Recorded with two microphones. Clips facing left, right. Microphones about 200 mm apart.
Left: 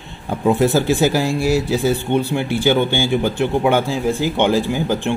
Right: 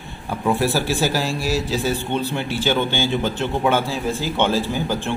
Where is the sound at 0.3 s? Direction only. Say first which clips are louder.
Left 5 dB; 20° left (ahead or behind).